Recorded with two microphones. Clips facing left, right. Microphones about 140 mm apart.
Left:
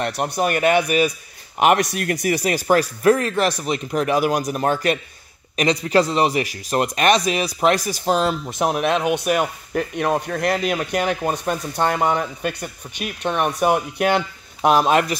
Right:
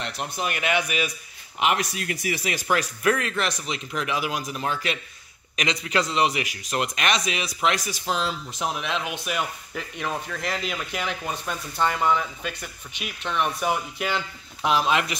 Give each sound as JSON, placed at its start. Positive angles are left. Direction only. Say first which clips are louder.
{"t": 0.0, "sound": "speech", "louder": "left 8 dB", "side_deg": 55}
{"t": 1.6, "sound": "speech", "louder": "left 8 dB", "side_deg": 55}
{"t": 5.6, "sound": "speech", "louder": "left 8 dB", "side_deg": 35}